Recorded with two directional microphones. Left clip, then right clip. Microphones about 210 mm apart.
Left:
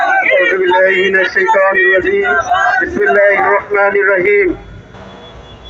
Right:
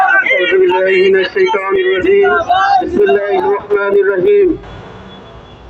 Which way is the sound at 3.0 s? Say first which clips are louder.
Left 2 dB; 35° right (ahead or behind).